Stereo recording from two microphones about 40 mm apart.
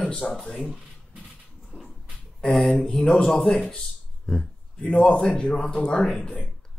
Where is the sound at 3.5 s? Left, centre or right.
Left.